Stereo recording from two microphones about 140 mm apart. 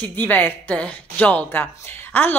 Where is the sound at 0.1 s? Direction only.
10° left (ahead or behind).